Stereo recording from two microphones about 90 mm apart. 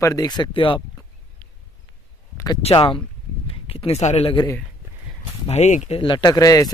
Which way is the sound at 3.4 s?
90° left.